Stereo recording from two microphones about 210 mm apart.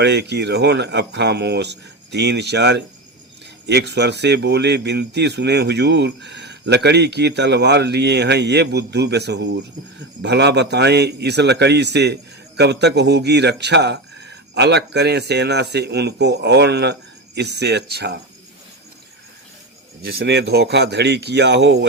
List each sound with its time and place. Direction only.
0.0 s speech: 55° right (ahead or behind)
20.0 s speech: 50° right (ahead or behind)